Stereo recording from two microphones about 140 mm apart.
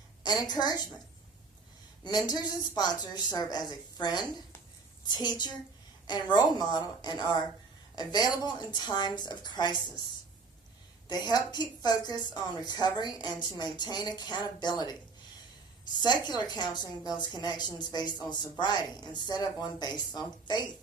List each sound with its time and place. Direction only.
0.2 s a woman's voice: 30° left (ahead or behind)
2.0 s a woman's voice: 30° left (ahead or behind)
11.1 s a woman's voice: 30° left (ahead or behind)